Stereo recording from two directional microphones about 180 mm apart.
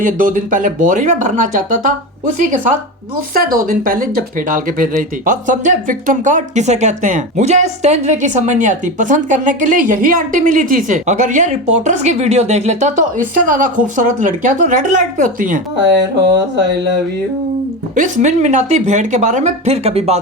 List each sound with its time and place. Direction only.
0.0 s a woman's voice: 45° right (ahead or behind)
3.3 s a woman's voice: 50° right (ahead or behind)
17.9 s speech: 45° right (ahead or behind)